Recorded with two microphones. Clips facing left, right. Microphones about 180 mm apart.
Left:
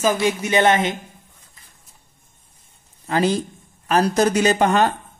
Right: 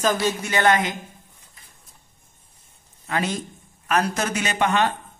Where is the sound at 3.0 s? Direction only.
35° left (ahead or behind).